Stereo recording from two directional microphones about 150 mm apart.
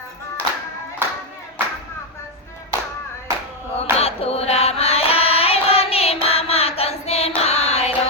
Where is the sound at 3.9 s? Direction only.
40° left (ahead or behind).